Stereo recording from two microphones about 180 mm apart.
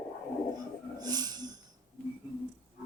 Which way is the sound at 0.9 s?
20° right (ahead or behind).